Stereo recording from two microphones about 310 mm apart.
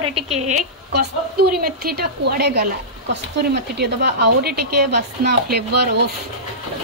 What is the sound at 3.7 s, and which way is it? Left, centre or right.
A woman's voice, right.